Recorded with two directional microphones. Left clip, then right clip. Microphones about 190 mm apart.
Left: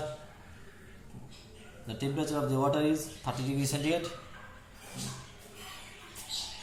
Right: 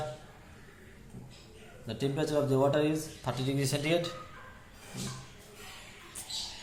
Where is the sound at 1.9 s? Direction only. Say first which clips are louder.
Right 2 dB; 45° right (ahead or behind).